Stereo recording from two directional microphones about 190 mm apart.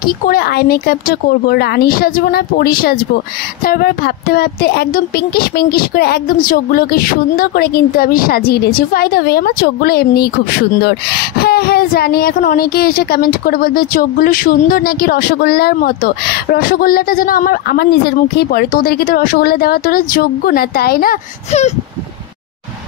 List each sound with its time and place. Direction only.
0.0 s speech: 55° left (ahead or behind)
21.5 s speech: 35° left (ahead or behind)